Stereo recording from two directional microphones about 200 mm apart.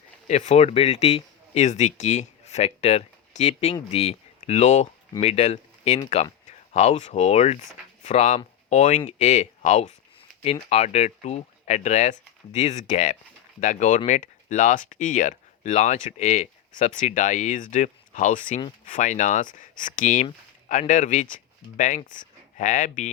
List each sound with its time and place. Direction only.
0.3 s speech: 35° left (ahead or behind)